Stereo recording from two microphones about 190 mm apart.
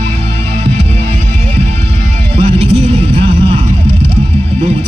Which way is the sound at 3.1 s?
30° right (ahead or behind).